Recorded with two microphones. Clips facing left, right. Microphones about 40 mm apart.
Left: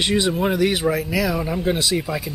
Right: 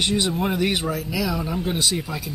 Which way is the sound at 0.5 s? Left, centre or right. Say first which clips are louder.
Left 3 dB; centre.